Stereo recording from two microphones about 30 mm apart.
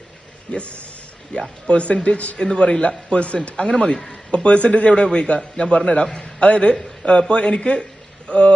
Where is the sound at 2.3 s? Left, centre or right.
Left.